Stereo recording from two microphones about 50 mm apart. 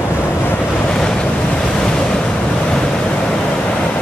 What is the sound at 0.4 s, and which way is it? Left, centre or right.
Waves, left.